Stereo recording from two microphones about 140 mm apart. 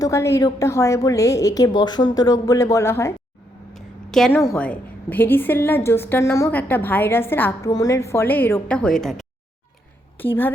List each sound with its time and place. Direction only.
0.0 s a woman's voice: 20° left (ahead or behind)
3.8 s a sound: centre (ahead or behind)
4.3 s a woman's voice: 15° left (ahead or behind)
7.7 s a woman's voice: 25° left (ahead or behind); by 9.2 s centre (ahead or behind)
10.2 s a woman's voice: 15° left (ahead or behind)